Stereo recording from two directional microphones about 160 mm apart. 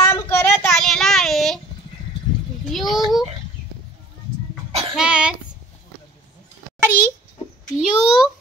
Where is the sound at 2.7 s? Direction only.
Centre (ahead or behind).